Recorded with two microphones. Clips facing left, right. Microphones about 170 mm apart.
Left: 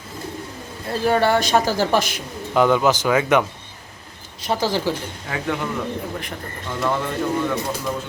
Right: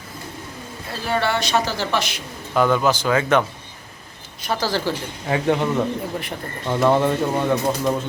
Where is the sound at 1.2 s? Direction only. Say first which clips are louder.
Left 3 dB; 45° left (ahead or behind).